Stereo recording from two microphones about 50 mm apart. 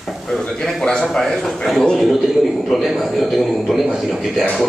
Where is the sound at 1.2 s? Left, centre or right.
Centre.